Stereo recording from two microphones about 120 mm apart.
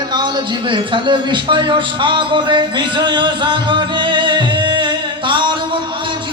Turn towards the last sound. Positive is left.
turn(degrees=-40)  # may be behind; listen again after turning